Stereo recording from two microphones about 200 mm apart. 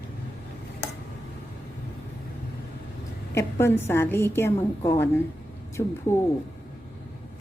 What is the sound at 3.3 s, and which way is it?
A woman's voice, 10° left (ahead or behind).